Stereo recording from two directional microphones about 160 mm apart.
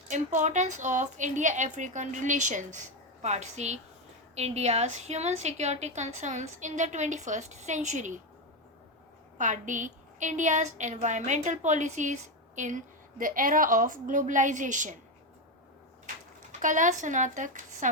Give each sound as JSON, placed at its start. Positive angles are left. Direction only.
{"t": 0.1, "sound": "a woman's voice", "side_deg": -50}
{"t": 9.4, "sound": "a woman's voice", "side_deg": -50}
{"t": 16.5, "sound": "a woman's voice", "side_deg": -50}